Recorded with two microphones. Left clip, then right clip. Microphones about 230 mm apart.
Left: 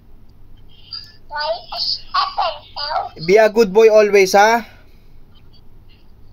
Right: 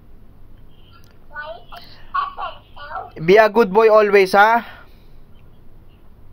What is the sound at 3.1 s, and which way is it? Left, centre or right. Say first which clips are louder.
Speech: even; centre.